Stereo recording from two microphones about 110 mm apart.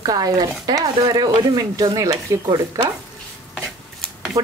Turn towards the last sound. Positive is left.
turn(degrees=-30)  # may be behind; listen again after turning